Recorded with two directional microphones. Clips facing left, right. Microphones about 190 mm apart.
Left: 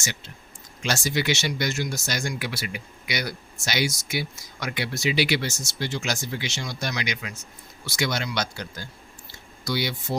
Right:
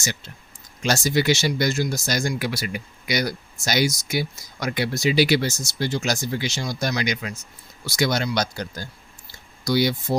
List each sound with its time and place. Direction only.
0.8 s speech: 40° right (ahead or behind)